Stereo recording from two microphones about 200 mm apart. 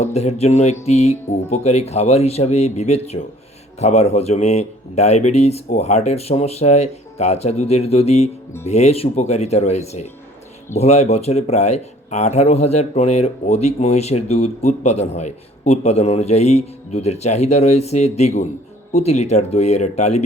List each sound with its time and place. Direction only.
0.0 s speech: 30° left (ahead or behind)